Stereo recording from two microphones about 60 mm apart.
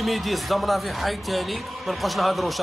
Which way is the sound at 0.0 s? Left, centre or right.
Centre.